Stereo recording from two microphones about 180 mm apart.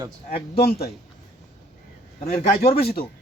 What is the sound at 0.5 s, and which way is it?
Speech, 60° left (ahead or behind).